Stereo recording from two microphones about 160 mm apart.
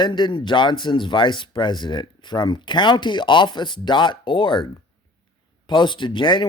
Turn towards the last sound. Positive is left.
turn(degrees=30)  # may be behind; listen again after turning